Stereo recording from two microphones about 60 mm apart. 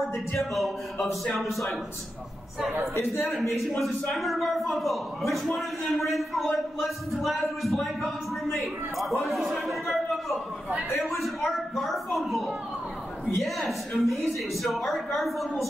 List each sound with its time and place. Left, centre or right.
0.4 s a man's voice: centre
3.0 s a man's voice: left
3.3 s a man's voice: centre